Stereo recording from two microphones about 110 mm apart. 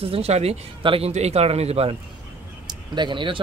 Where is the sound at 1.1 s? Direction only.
75° right (ahead or behind).